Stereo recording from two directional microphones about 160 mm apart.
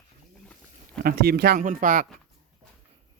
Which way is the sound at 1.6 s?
55° right (ahead or behind).